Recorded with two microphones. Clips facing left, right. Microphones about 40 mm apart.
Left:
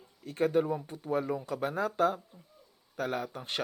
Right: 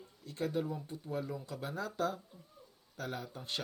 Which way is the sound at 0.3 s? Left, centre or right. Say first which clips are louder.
Left 8 dB; left.